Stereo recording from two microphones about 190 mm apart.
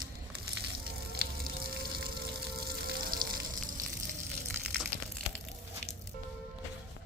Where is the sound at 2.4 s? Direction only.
50° right (ahead or behind).